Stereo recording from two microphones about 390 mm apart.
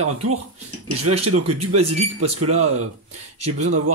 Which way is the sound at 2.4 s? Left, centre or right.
Right.